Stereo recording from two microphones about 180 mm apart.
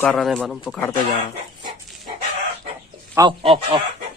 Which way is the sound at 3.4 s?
30° right (ahead or behind).